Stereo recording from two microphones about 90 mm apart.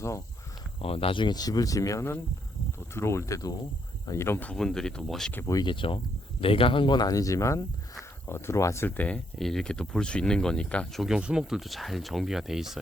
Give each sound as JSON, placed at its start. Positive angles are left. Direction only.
{"t": 0.8, "sound": "speech", "side_deg": 90}
{"t": 4.5, "sound": "speech", "side_deg": 5}
{"t": 5.6, "sound": "speech", "side_deg": 70}
{"t": 6.4, "sound": "speech", "side_deg": 90}
{"t": 9.0, "sound": "speech", "side_deg": 15}
{"t": 11.0, "sound": "speech", "side_deg": -10}